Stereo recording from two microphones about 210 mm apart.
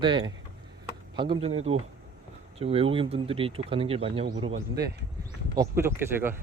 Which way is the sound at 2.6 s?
25° right (ahead or behind).